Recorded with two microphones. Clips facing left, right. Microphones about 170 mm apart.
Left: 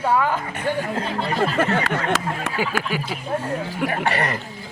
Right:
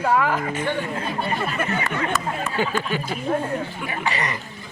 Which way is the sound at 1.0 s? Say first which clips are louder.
Left 3 dB; 90° left.